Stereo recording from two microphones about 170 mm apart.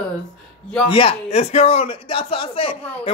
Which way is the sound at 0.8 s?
30° left (ahead or behind).